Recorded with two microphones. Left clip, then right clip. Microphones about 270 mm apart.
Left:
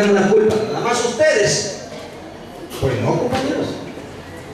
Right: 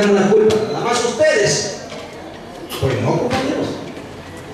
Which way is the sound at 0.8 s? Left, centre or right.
Centre.